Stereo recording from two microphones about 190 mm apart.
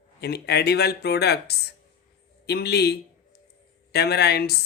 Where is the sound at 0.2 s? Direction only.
60° left (ahead or behind).